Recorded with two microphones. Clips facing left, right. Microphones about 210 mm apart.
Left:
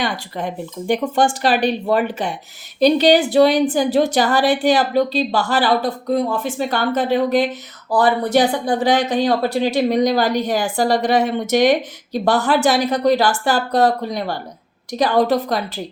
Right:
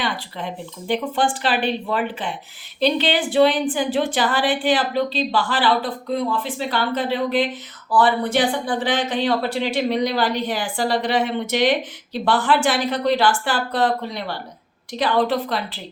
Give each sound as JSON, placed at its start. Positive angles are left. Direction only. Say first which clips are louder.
{"t": 0.0, "sound": "a woman's voice", "louder": "left 4 dB", "side_deg": 45}